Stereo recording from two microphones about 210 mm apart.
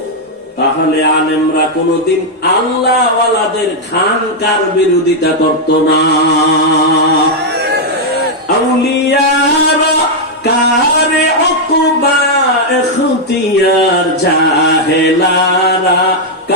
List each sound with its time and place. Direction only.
5.9 s mantra: 50° left (ahead or behind)